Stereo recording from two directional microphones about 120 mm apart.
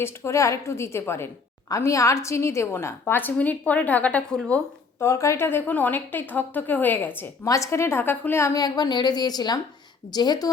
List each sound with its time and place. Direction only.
0.0 s a woman's voice: 25° left (ahead or behind)
5.0 s a woman's voice: 25° left (ahead or behind)
7.4 s a woman's voice: 25° left (ahead or behind)
8.5 s a woman's voice: 35° left (ahead or behind)